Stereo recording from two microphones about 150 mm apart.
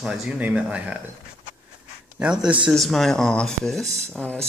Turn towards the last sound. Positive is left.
turn(degrees=5)  # may be behind; listen again after turning